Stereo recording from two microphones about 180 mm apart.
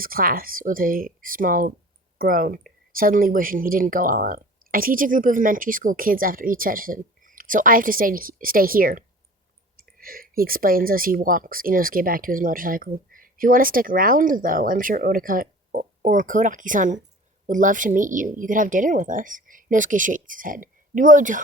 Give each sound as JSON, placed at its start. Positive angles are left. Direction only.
{"t": 0.0, "sound": "speech", "side_deg": -55}